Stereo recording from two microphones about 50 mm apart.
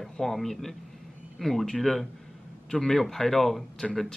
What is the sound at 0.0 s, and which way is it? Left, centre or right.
Speech, centre.